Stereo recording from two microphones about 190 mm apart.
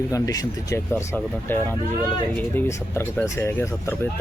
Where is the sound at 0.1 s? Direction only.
20° left (ahead or behind).